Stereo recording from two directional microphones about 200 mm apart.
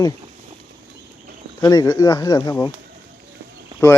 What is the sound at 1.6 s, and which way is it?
Speech, 20° left (ahead or behind).